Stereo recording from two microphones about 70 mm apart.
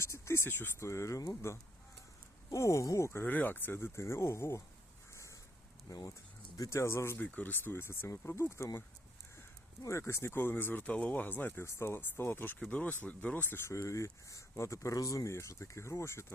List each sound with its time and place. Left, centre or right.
0.0 s speech: left
0.8 s speech: left
2.5 s speech: left
3.3 s speech: left
5.9 s speech: left
6.6 s speech: left
7.2 s speech: left
9.8 s speech: left
12.5 s speech: centre
13.7 s speech: left